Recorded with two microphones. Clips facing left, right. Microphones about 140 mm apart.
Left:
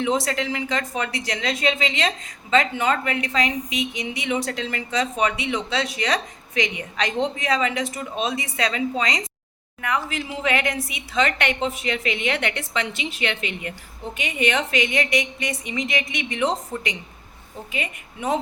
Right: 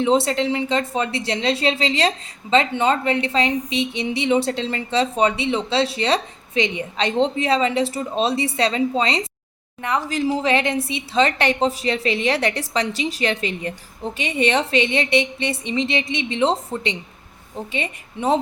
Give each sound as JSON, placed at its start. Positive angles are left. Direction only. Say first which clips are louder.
{"t": 0.0, "sound": "a woman's voice", "louder": "right 5 dB", "side_deg": -25}